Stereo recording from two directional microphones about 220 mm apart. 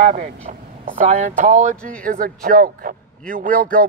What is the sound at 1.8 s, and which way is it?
Speech, 5° left (ahead or behind).